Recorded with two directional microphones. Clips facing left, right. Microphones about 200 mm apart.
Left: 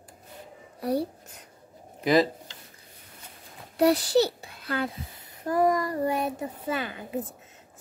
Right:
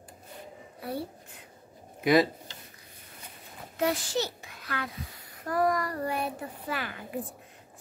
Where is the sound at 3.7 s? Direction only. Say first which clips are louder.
Left 8 dB; 35° left (ahead or behind).